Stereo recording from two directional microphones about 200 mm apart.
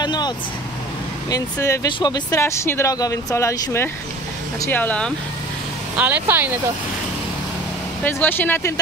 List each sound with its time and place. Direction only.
0.0 s vehicle: 20° left (ahead or behind)
1.3 s speech: 15° left (ahead or behind)
5.9 s speech: 10° right (ahead or behind)
8.0 s speech: 10° left (ahead or behind)